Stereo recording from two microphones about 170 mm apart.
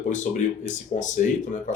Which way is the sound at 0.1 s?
45° left (ahead or behind).